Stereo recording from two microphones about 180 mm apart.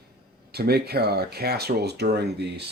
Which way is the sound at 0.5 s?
60° right (ahead or behind).